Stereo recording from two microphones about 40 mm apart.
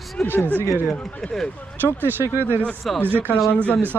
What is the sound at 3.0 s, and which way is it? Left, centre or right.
Speech, right.